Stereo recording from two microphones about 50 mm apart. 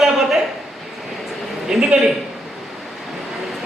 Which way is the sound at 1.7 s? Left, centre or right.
Centre.